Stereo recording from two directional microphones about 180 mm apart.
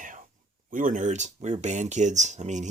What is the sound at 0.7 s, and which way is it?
Speech, 45° right (ahead or behind).